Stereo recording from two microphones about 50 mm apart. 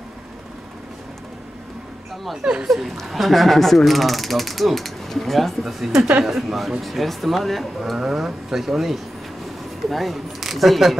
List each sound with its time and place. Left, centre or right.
2.4 s speech: centre
2.7 s speech: centre